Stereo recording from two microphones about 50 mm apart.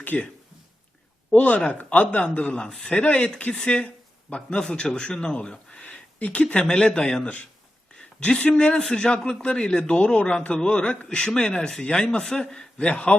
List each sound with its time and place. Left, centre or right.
0.0 s speech: left
1.4 s speech: left
2.6 s a man's voice: centre
2.9 s a man's voice: left